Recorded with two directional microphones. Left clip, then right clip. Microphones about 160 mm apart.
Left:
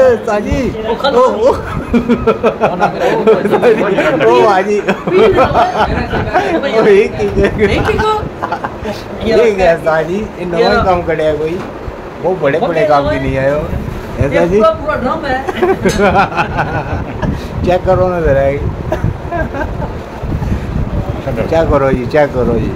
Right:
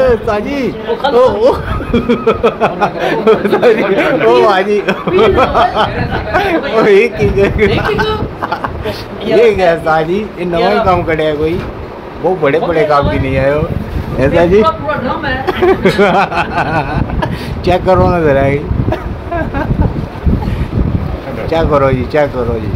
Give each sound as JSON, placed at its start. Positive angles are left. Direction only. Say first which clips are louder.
{"t": 0.0, "sound": "speech", "louder": "left 1 dB", "side_deg": 0}
{"t": 21.5, "sound": "speech", "louder": "right 1 dB", "side_deg": -5}